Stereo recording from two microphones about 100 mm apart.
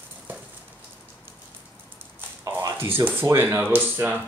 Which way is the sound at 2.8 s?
20° right (ahead or behind).